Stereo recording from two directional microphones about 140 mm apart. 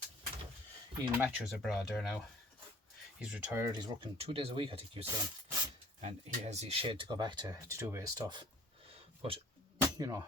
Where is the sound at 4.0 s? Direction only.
40° right (ahead or behind); by 8.1 s 20° right (ahead or behind).